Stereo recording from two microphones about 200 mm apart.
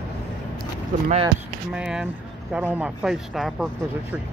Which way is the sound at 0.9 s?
40° right (ahead or behind).